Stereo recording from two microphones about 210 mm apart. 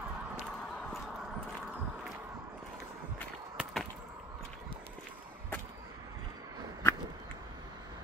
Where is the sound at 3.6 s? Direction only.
Centre (ahead or behind).